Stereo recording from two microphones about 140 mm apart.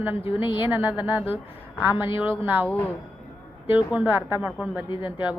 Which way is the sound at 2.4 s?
15° right (ahead or behind).